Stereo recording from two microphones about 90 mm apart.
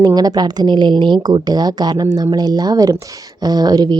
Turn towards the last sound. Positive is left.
turn(degrees=-50)  # may be behind; listen again after turning